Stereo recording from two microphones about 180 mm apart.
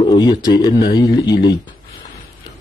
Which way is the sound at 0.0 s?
25° left (ahead or behind).